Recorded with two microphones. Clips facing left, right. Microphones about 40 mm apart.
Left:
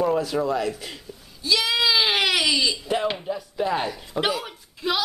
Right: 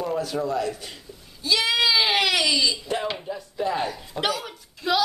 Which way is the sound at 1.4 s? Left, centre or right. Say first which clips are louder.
Even; centre.